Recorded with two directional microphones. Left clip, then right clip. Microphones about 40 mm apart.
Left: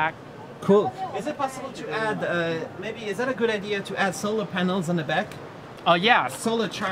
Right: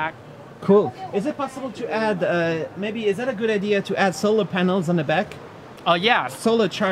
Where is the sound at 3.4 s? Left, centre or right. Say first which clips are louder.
Right 5 dB; left.